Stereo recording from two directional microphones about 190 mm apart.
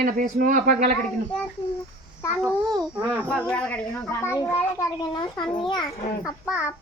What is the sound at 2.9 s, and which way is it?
Speech, 10° right (ahead or behind).